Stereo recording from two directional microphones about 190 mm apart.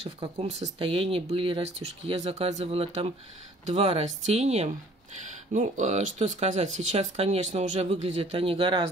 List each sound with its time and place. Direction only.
0.0 s speech: 35° right (ahead or behind)